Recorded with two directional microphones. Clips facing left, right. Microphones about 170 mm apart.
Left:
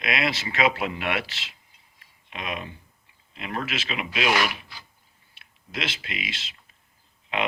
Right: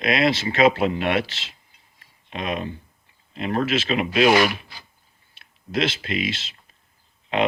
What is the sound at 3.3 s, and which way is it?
Speech, 35° right (ahead or behind).